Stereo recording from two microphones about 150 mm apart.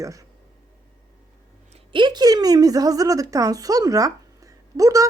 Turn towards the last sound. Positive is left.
turn(degrees=-20)  # may be behind; listen again after turning